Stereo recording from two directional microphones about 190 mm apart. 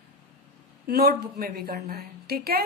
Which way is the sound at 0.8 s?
55° right (ahead or behind).